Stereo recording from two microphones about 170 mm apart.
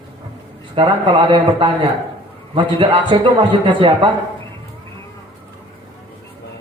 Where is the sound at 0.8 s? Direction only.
30° right (ahead or behind).